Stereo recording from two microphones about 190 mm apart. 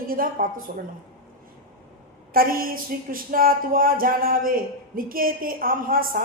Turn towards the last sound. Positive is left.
turn(degrees=-50)  # may be behind; listen again after turning